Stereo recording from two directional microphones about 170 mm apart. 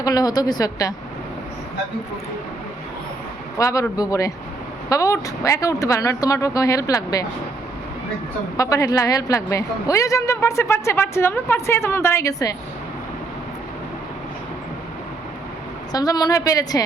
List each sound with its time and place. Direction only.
0.0 s speech: 20° left (ahead or behind)
3.6 s speech: 20° left (ahead or behind)
8.5 s a woman's voice: 20° left (ahead or behind)
15.9 s speech: 20° left (ahead or behind)